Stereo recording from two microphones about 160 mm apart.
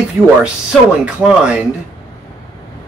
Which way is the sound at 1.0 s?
5° right (ahead or behind).